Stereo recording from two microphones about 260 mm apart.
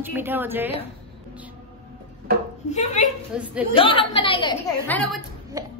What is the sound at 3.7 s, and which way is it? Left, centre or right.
Speech, centre.